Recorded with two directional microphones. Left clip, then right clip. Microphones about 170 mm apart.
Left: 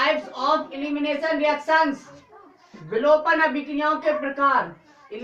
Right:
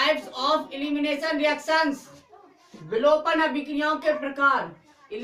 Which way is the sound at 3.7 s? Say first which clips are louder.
Even; 10° right (ahead or behind).